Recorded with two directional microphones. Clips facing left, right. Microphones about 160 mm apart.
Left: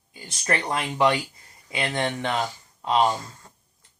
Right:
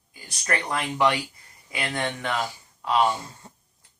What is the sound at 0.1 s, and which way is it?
Speech, 25° left (ahead or behind).